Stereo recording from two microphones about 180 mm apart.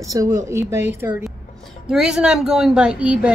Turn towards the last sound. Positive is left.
turn(degrees=-5)  # may be behind; listen again after turning